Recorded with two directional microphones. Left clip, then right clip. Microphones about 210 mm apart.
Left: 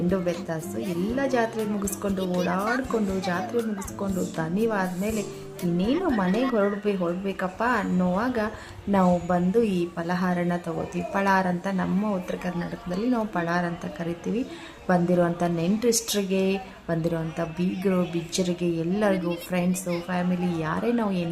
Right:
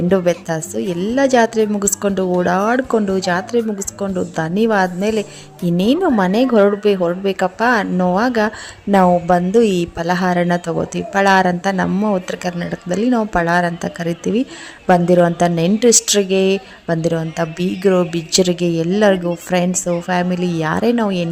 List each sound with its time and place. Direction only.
0.1 s a woman's voice: 45° right (ahead or behind)